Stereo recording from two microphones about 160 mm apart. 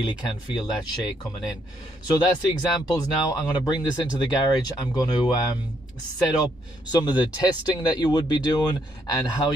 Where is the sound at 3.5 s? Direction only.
25° left (ahead or behind).